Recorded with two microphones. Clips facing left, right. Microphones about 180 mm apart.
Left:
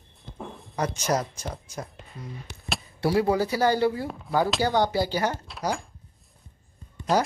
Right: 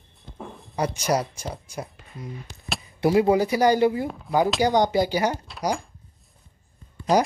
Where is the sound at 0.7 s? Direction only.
10° right (ahead or behind).